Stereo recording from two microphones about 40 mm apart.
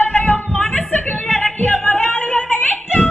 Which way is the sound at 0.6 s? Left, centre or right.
Left.